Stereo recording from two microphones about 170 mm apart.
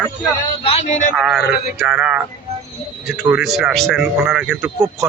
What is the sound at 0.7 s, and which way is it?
Speech, 40° left (ahead or behind).